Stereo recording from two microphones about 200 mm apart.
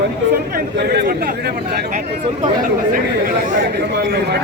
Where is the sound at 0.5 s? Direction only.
50° right (ahead or behind).